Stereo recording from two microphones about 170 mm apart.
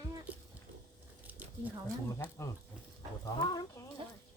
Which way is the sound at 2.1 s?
15° left (ahead or behind).